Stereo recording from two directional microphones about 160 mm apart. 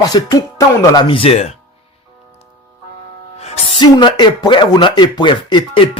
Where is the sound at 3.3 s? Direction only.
40° left (ahead or behind).